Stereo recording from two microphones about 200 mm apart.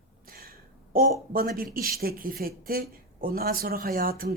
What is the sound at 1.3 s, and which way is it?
Speech, 45° right (ahead or behind).